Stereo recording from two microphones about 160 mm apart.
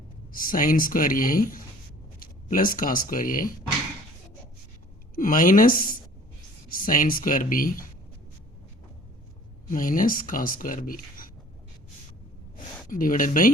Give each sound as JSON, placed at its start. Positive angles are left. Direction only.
{"t": 0.3, "sound": "speech", "side_deg": 60}
{"t": 5.1, "sound": "speech", "side_deg": 60}
{"t": 9.6, "sound": "speech", "side_deg": 60}
{"t": 12.9, "sound": "speech", "side_deg": 60}